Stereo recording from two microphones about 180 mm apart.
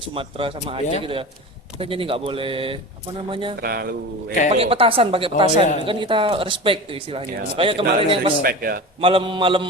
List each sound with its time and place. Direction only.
0.1 s speech: 30° right (ahead or behind)
3.6 s a man's voice: 55° right (ahead or behind)
4.5 s speech: 30° right (ahead or behind)
8.4 s a man's voice: 55° right (ahead or behind)
9.0 s speech: 30° right (ahead or behind)